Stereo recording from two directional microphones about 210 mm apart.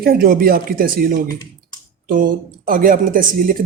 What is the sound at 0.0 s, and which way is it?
Speech, 45° right (ahead or behind).